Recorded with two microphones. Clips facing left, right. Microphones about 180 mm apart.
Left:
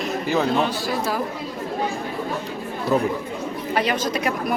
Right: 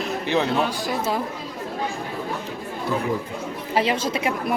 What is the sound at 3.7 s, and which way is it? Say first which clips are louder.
Speech: right 1 dB; 25° right (ahead or behind).